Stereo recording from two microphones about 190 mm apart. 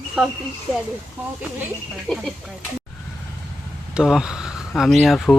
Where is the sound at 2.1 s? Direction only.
Centre (ahead or behind).